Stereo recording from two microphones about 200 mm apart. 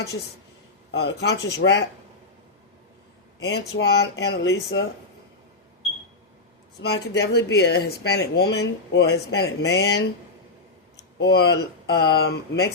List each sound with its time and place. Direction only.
0.9 s speech: 55° left (ahead or behind)
3.4 s speech: 55° left (ahead or behind)
6.8 s speech: 55° left (ahead or behind)
11.2 s speech: 55° left (ahead or behind)